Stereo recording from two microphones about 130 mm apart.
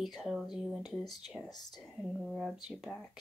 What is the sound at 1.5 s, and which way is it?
Speech, 30° left (ahead or behind).